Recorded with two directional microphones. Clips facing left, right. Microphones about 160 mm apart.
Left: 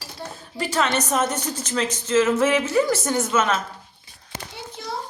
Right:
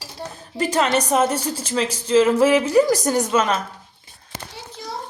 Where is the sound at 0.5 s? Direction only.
40° right (ahead or behind).